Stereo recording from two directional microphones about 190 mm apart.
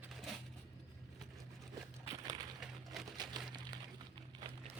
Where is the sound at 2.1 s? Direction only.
20° right (ahead or behind).